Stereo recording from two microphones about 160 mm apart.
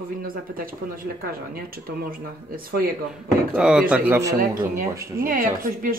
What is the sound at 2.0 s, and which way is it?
Speech, 65° right (ahead or behind).